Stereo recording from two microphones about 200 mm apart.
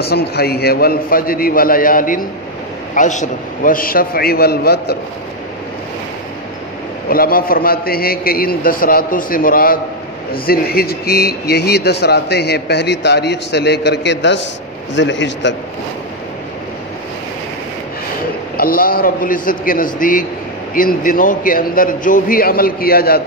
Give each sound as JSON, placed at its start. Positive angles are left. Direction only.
{"t": 0.1, "sound": "a man's voice", "side_deg": 50}
{"t": 7.1, "sound": "a man's voice", "side_deg": 45}
{"t": 18.6, "sound": "a man's voice", "side_deg": 45}